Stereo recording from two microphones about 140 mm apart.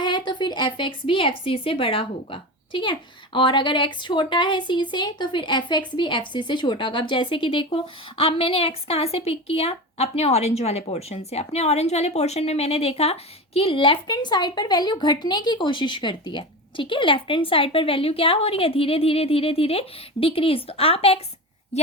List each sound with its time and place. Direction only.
0.0 s a woman's voice: 35° left (ahead or behind); by 21.9 s 50° left (ahead or behind)